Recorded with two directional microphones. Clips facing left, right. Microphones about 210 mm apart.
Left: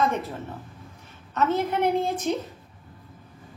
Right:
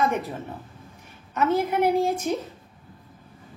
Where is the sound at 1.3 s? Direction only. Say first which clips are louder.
Right 1 dB; 10° right (ahead or behind).